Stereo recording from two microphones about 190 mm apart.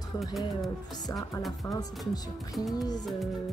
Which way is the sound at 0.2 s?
Centre (ahead or behind).